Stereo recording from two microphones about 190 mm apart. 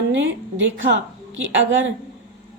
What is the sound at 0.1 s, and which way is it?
Speech, 75° right (ahead or behind).